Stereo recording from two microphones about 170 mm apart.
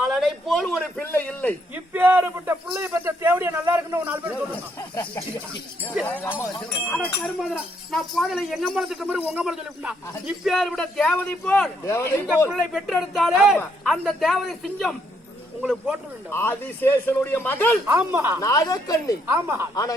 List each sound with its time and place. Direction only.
0.0 s a man's voice: centre (ahead or behind)
1.7 s a man's voice: 10° right (ahead or behind)
6.2 s speech: 15° left (ahead or behind)
12.5 s speech: centre (ahead or behind)
16.3 s speech: 15° left (ahead or behind)
17.8 s a man's voice: 10° right (ahead or behind)
18.3 s speech: 20° left (ahead or behind)
19.3 s a man's voice: 15° right (ahead or behind)